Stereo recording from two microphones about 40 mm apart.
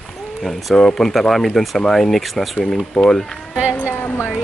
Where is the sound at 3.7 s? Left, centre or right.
Left.